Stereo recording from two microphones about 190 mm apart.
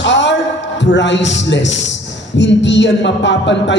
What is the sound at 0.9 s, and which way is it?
A man's voice, 70° left (ahead or behind).